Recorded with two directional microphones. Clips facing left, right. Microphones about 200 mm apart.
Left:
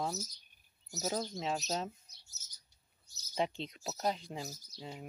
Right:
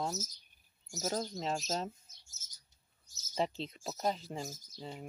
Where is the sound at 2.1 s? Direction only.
45° right (ahead or behind).